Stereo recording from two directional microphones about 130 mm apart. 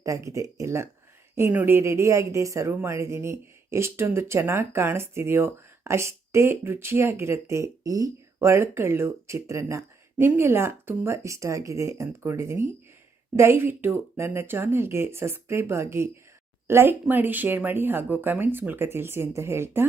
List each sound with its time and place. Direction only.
0.0 s speech: 25° right (ahead or behind)